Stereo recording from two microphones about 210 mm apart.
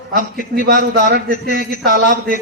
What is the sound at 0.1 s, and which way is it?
A man's voice, 45° right (ahead or behind).